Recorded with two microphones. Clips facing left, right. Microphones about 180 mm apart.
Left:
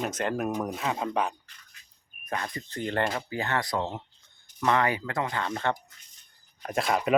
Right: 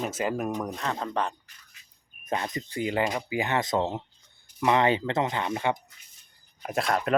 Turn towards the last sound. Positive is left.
turn(degrees=0)  # may be behind; listen again after turning